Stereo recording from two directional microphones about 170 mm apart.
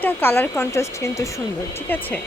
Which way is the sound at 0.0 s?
10° left (ahead or behind).